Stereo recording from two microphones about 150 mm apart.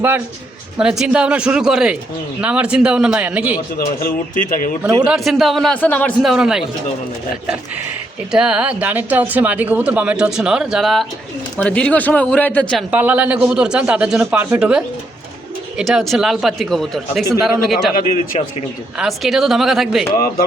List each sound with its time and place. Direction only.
0.8 s speech: 5° right (ahead or behind)
3.8 s speech: 65° left (ahead or behind)
5.0 s speech: centre (ahead or behind)
6.2 s speech: 5° right (ahead or behind)
8.3 s speech: 5° right (ahead or behind)
12.9 s speech: 10° right (ahead or behind)
18.0 s speech: 50° left (ahead or behind)
18.9 s speech: centre (ahead or behind)